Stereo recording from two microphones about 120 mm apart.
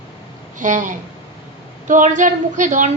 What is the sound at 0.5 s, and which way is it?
A child's voice, 90° right.